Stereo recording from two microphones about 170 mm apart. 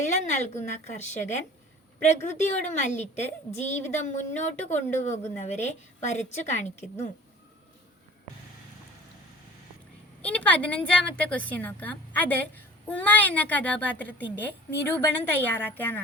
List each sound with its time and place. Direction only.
0.0 s a woman's voice: 45° left (ahead or behind)
10.2 s a woman's voice: 10° left (ahead or behind)